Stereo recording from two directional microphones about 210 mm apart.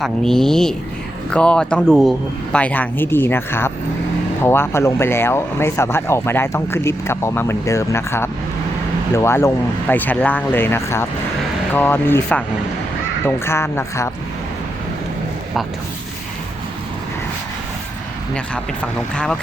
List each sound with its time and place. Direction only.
0.0 s speech: centre (ahead or behind)
18.3 s speech: 5° left (ahead or behind)